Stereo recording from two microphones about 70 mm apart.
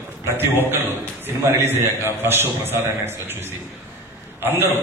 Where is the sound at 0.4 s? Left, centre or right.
Right.